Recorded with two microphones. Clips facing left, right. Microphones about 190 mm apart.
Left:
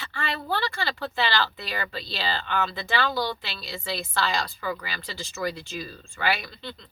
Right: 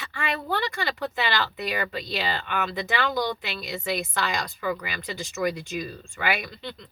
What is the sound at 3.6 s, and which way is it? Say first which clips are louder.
Speech: right 4 dB; 15° right (ahead or behind).